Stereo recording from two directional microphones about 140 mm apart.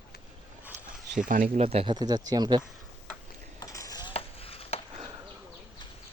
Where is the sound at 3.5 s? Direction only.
25° left (ahead or behind).